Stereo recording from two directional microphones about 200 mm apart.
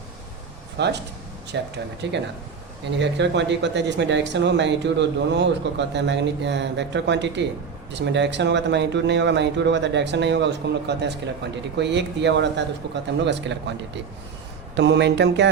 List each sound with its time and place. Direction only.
0.8 s speech: 55° right (ahead or behind)